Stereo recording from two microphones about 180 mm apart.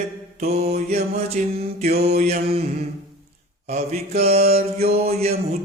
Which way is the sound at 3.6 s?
35° right (ahead or behind).